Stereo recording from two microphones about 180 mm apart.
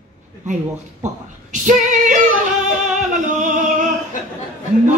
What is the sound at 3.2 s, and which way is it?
Music, 45° right (ahead or behind).